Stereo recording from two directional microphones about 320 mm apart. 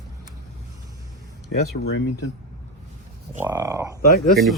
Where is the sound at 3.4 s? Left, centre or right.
Centre.